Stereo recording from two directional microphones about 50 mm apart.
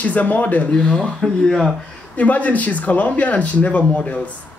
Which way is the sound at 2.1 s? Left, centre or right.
Left.